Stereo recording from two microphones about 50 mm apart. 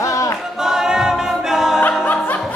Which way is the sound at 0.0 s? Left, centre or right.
Left.